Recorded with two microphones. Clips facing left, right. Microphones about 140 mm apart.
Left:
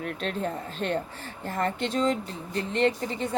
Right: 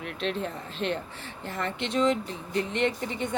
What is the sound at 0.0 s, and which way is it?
Speech, 45° left (ahead or behind).